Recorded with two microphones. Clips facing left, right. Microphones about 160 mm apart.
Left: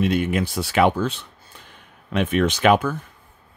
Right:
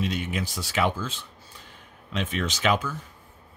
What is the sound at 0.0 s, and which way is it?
Speech, 55° left (ahead or behind).